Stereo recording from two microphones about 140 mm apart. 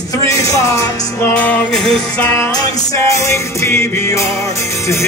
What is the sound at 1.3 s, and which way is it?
Music, 10° left (ahead or behind).